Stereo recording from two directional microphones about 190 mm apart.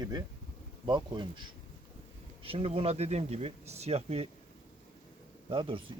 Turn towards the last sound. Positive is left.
turn(degrees=-30)  # may be behind; listen again after turning